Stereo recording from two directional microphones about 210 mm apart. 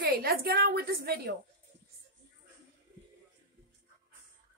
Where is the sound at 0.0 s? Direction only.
45° right (ahead or behind).